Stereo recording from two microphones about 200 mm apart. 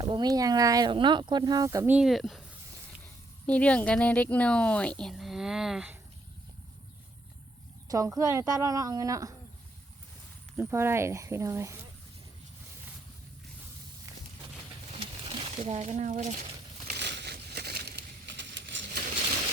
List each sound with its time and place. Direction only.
0.0 s speech: 20° right (ahead or behind); by 2.4 s centre (ahead or behind)
3.4 s speech: 5° left (ahead or behind)
7.9 s a woman's voice: 15° right (ahead or behind)
10.6 s a woman's voice: 10° right (ahead or behind)
14.8 s a sound: 30° right (ahead or behind)
16.9 s a sound: 60° right (ahead or behind)